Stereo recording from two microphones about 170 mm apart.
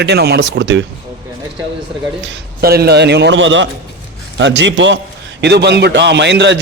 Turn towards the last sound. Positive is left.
turn(degrees=-90)